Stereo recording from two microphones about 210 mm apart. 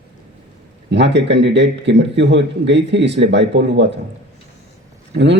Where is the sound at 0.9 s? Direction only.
55° right (ahead or behind).